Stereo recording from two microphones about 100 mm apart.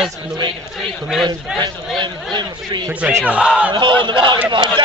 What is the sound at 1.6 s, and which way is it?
Battle cry, 50° right (ahead or behind).